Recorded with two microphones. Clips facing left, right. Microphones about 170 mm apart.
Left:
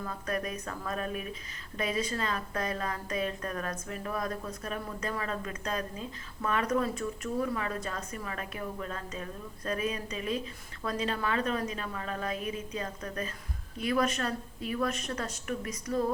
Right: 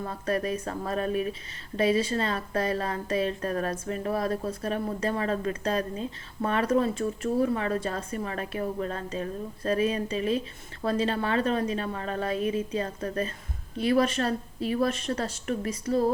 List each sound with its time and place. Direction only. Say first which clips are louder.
0.0 s speech: right 5 dB; 35° right (ahead or behind)